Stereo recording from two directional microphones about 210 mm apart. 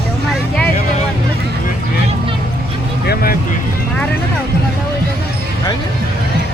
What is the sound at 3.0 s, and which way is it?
Vehicle, 45° left (ahead or behind).